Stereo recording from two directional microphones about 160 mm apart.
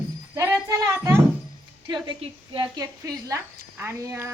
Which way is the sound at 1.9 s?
30° right (ahead or behind).